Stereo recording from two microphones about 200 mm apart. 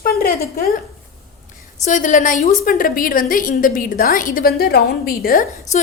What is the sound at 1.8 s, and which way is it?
A woman's voice, 40° left (ahead or behind).